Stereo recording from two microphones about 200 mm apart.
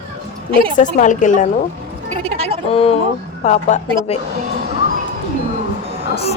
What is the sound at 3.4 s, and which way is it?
Speech, 35° left (ahead or behind).